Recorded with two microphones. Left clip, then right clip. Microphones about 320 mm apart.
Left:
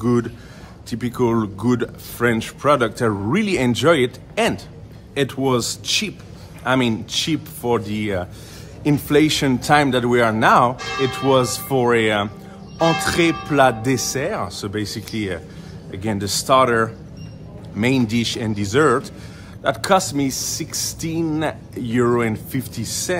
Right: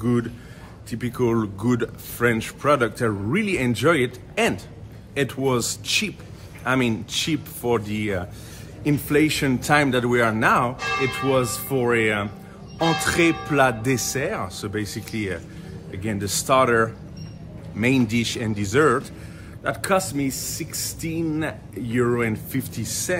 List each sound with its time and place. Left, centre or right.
0.0 s speech: centre